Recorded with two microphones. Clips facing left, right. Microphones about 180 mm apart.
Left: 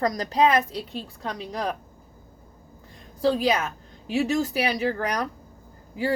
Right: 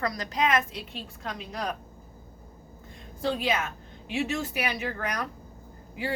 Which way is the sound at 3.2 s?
35° left (ahead or behind).